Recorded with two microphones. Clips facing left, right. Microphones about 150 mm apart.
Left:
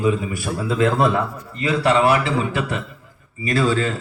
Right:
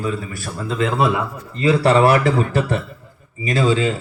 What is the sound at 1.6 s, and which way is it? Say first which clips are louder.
A man's voice: right 3 dB; 35° right (ahead or behind).